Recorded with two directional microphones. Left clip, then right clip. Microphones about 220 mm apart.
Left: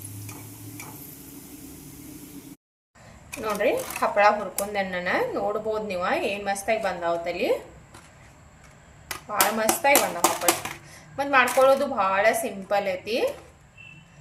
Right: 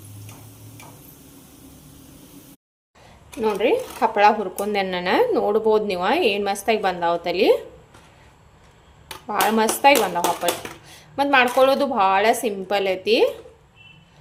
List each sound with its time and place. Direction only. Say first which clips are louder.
3.4 s speech: right 4 dB; 40° right (ahead or behind)
9.3 s speech: right 4 dB; 50° right (ahead or behind)
11.2 s speech: right 3 dB; 45° right (ahead or behind)